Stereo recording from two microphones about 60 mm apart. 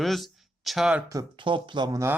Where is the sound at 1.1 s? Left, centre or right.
Right.